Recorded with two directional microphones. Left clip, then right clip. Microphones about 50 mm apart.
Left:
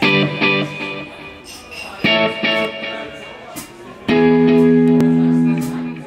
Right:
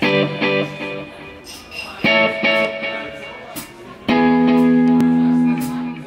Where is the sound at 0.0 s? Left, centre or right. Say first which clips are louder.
Left 2 dB; centre.